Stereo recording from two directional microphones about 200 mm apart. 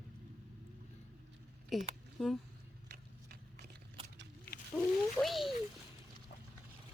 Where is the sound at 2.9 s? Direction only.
50° right (ahead or behind).